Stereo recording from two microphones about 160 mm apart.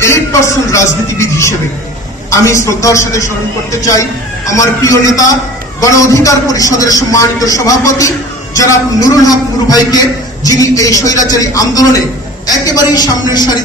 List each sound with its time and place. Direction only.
0.0 s a man's voice: 20° left (ahead or behind)
4.5 s a man's voice: 20° left (ahead or behind)